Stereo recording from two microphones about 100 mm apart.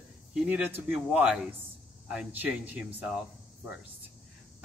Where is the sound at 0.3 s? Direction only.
10° right (ahead or behind).